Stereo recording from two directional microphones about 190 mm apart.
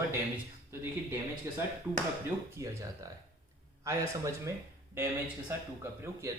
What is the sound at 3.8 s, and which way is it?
Speech, 15° right (ahead or behind).